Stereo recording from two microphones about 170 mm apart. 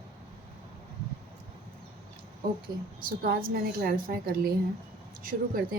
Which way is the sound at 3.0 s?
60° right (ahead or behind).